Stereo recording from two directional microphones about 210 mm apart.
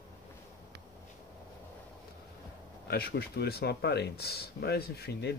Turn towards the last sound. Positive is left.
turn(degrees=50)  # may be behind; listen again after turning